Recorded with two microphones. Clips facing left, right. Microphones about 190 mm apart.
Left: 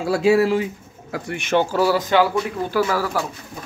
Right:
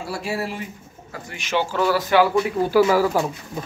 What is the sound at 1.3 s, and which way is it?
Speech, 55° left (ahead or behind).